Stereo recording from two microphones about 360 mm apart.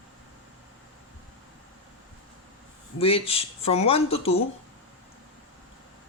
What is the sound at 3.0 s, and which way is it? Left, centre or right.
Speech, centre.